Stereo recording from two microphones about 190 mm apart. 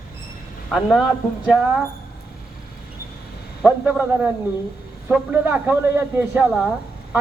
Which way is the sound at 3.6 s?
5° right (ahead or behind).